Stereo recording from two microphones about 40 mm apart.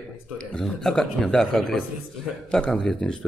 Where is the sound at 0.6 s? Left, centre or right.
Centre.